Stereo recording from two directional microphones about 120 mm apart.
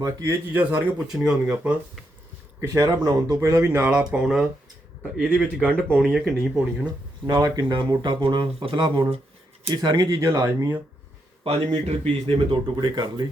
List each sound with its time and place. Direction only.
0.0 s speech: 30° right (ahead or behind)
0.5 s speech: 15° right (ahead or behind)
2.6 s speech: 30° right (ahead or behind); by 5.7 s 10° right (ahead or behind)
5.7 s speech: 5° left (ahead or behind)
7.3 s speech: 30° right (ahead or behind)
10.2 s speech: 20° right (ahead or behind)
11.4 s a man's voice: 55° right (ahead or behind)
12.7 s speech: 35° right (ahead or behind)